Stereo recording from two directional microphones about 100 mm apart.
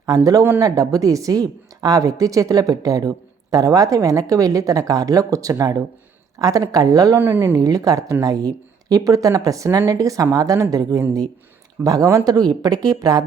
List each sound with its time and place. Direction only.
0.6 s a woman's voice: 35° right (ahead or behind)
7.2 s speech: 20° right (ahead or behind)
7.5 s a woman's voice: 35° right (ahead or behind)